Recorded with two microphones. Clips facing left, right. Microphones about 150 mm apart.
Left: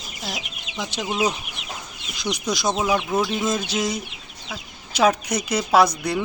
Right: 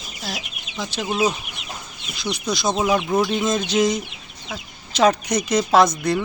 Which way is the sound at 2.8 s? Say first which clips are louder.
Right 4 dB; 10° right (ahead or behind).